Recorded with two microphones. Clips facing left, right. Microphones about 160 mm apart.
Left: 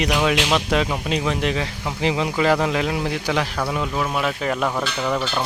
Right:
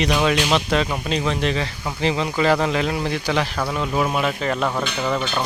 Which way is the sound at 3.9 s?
15° right (ahead or behind).